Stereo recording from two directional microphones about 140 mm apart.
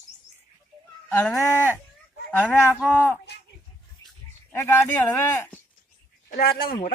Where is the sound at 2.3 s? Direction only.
10° left (ahead or behind).